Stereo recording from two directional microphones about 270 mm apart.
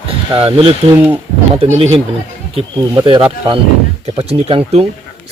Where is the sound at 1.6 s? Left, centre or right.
Right.